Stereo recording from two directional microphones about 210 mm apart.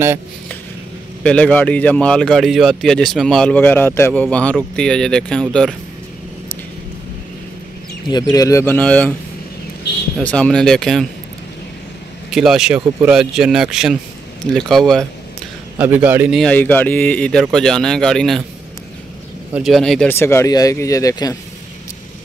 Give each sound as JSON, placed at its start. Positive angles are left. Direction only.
{"t": 1.2, "sound": "speech", "side_deg": 5}
{"t": 8.1, "sound": "speech", "side_deg": 15}
{"t": 8.6, "sound": "speech", "side_deg": 5}
{"t": 10.1, "sound": "speech", "side_deg": 5}
{"t": 12.3, "sound": "speech", "side_deg": 0}
{"t": 19.5, "sound": "speech", "side_deg": 0}